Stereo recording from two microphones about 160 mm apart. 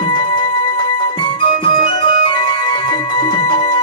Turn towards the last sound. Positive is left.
turn(degrees=30)  # may be behind; listen again after turning